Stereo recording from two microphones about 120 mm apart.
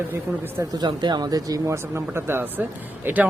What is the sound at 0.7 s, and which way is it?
Speech, 35° right (ahead or behind).